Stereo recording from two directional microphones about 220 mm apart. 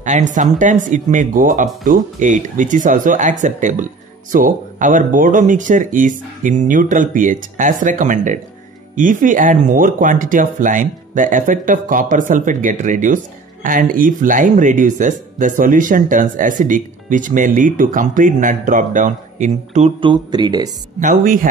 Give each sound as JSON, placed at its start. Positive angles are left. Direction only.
{"t": 0.0, "sound": "speech", "side_deg": -35}
{"t": 21.0, "sound": "speech", "side_deg": -35}